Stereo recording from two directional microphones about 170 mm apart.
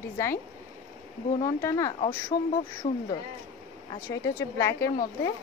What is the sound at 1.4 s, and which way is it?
Speech, 20° left (ahead or behind).